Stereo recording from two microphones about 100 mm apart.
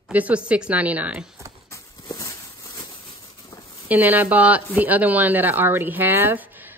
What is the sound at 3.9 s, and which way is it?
Speech, 20° right (ahead or behind).